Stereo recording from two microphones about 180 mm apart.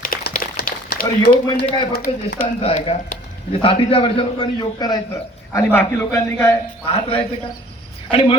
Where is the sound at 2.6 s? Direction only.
30° left (ahead or behind); by 6.5 s 15° left (ahead or behind).